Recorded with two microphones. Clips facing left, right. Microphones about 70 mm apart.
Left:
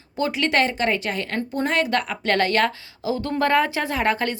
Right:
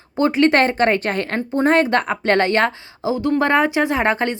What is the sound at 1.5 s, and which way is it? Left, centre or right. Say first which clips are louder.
A woman's voice: right 7 dB; right.